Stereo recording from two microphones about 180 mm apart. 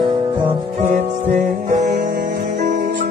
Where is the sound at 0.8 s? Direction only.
40° right (ahead or behind).